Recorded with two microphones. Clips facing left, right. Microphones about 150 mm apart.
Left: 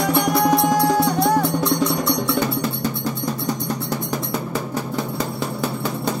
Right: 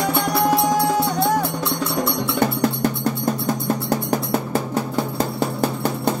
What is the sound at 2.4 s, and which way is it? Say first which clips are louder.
Music: right 3 dB; 60° right (ahead or behind).